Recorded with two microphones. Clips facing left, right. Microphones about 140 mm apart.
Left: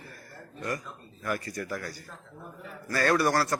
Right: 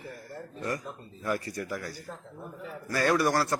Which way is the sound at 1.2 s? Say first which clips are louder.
Right 1 dB; 25° right (ahead or behind).